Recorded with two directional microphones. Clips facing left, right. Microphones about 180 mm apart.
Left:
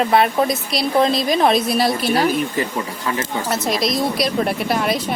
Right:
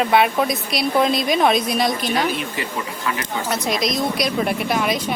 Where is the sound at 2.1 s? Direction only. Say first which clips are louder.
Left 4 dB; 40° left (ahead or behind).